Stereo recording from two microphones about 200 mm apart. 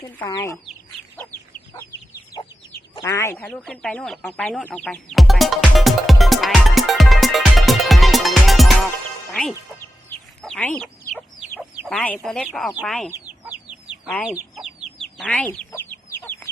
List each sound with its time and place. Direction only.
0.2 s speech: 15° left (ahead or behind)
2.9 s chicken: 15° left (ahead or behind); by 8.7 s centre (ahead or behind)
9.3 s speech: centre (ahead or behind)
10.4 s chicken: 5° left (ahead or behind)
11.9 s speech: 5° left (ahead or behind)
13.1 s chicken: 10° right (ahead or behind)
14.2 s speech: 5° right (ahead or behind)
15.2 s chicken: 5° left (ahead or behind)